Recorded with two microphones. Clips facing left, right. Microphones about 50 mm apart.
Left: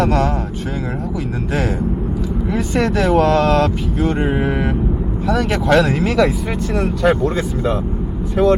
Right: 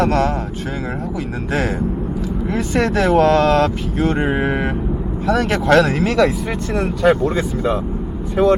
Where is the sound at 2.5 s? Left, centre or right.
Centre.